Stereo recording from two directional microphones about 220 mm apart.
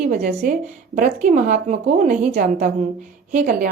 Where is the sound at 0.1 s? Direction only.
35° right (ahead or behind).